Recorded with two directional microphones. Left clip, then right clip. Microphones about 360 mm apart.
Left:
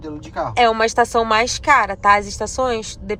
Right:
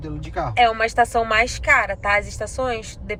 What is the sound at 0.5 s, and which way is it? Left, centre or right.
Speech, centre.